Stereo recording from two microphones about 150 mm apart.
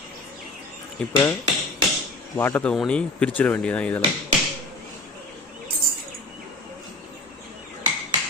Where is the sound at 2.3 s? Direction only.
15° left (ahead or behind).